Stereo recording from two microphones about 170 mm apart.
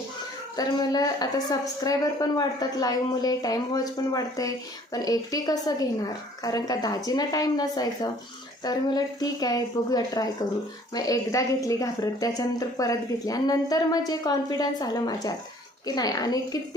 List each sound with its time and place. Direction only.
0.5 s a woman's voice: 20° left (ahead or behind)